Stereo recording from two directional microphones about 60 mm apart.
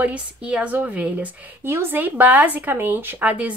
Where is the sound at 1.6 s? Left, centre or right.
Right.